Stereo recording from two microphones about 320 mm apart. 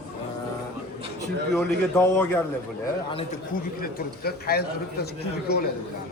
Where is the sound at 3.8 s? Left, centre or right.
Left.